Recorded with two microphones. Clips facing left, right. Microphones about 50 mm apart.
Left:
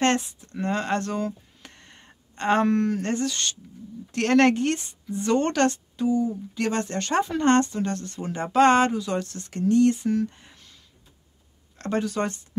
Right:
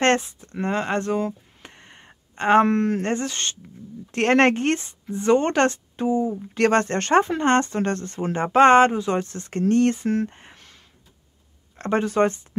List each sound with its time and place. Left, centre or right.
0.0 s speech: right
6.5 s speech: right
7.3 s speech: right
7.7 s speech: right
9.6 s speech: right
11.8 s speech: right